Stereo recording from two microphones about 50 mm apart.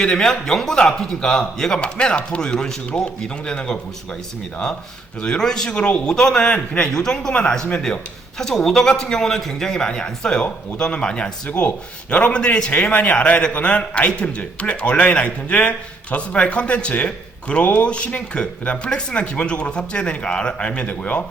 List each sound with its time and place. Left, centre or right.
0.0 s a man's voice: centre
5.2 s a man's voice: centre
12.7 s speech: left